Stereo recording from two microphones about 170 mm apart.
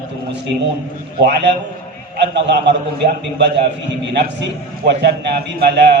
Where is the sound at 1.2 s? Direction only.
80° right.